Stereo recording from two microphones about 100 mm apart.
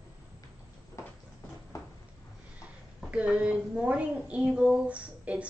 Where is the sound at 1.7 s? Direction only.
35° left (ahead or behind).